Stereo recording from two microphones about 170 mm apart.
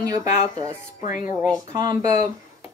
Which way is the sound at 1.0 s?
50° left (ahead or behind).